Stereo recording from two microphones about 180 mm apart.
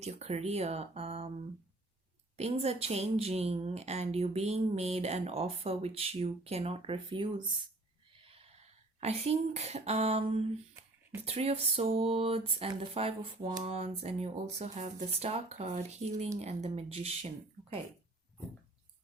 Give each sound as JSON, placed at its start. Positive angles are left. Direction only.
{"t": 0.0, "sound": "a woman's voice", "side_deg": -35}
{"t": 2.3, "sound": "a woman's voice", "side_deg": -35}